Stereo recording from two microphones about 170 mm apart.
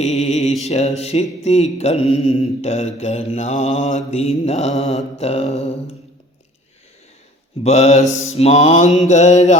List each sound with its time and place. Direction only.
0.0 s mantra: 40° left (ahead or behind)
7.6 s mantra: 40° left (ahead or behind)